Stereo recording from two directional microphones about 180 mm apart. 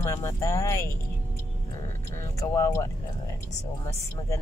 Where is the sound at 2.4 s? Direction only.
20° left (ahead or behind).